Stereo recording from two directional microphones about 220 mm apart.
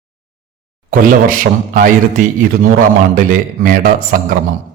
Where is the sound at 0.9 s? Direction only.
40° right (ahead or behind).